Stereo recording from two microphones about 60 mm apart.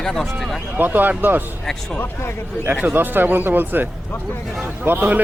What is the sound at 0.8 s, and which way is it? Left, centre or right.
Speech, right.